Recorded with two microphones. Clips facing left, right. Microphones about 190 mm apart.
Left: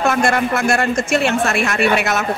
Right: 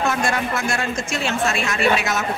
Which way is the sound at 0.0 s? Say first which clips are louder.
Left 5 dB; 65° left (ahead or behind).